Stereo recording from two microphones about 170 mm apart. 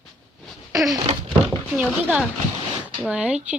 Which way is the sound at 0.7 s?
20° right (ahead or behind).